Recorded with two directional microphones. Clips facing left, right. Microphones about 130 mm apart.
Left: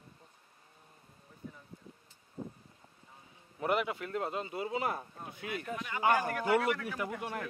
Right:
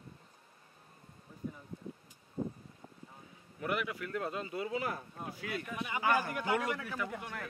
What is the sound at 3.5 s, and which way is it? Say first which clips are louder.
Speech: left 4 dB; 25° left (ahead or behind).